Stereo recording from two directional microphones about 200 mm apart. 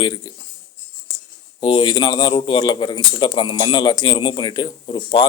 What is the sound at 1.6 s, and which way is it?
Speech, 25° left (ahead or behind).